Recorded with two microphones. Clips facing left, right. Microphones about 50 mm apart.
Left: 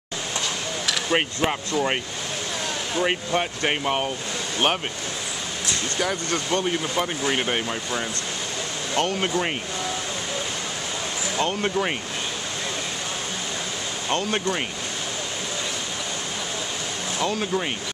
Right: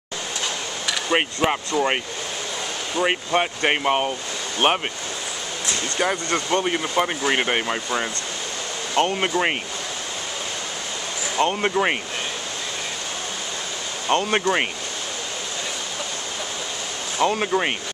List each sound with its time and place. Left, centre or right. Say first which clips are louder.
1.1 s speech: right 3 dB; centre
3.0 s speech: right 3 dB; centre
5.9 s speech: right 4 dB; right
6.5 s speech: right 2 dB; centre
11.3 s speech: right 4 dB; centre
14.2 s speech: right 4 dB; right
17.2 s speech: right 5 dB; right